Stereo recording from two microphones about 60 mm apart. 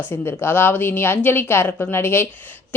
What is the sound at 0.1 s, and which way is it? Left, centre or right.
A woman's voice, left.